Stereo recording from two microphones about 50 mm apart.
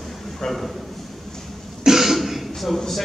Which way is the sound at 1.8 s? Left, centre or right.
Centre.